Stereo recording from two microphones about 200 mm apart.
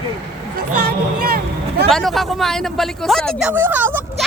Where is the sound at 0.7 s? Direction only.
50° right (ahead or behind).